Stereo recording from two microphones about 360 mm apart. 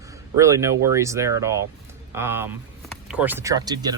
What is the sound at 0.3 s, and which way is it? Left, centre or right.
Speech, centre.